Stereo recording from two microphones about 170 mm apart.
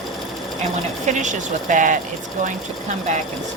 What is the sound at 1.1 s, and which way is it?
Speech, 45° right (ahead or behind).